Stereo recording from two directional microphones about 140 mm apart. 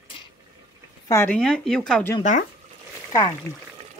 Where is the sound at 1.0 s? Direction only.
20° left (ahead or behind).